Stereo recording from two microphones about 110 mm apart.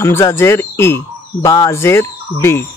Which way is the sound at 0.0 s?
25° left (ahead or behind).